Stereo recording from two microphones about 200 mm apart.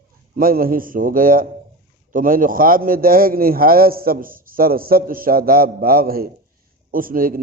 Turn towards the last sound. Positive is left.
turn(degrees=-45)  # may be behind; listen again after turning